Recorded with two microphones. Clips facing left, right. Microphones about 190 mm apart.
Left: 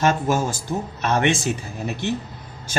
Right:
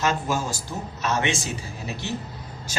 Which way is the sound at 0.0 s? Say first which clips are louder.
Left 5 dB; 50° left (ahead or behind).